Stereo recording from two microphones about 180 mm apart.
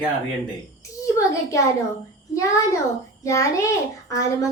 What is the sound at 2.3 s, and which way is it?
A child's voice, 15° left (ahead or behind).